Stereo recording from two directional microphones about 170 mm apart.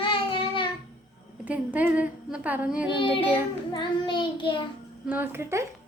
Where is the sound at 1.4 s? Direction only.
10° right (ahead or behind).